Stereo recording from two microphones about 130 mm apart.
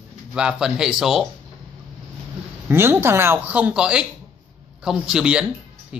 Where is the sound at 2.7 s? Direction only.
20° right (ahead or behind).